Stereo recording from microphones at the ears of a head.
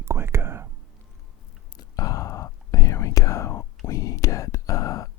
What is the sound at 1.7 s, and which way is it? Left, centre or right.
Whispering, left.